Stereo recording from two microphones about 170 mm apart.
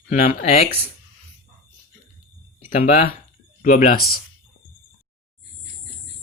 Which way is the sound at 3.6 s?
55° left (ahead or behind).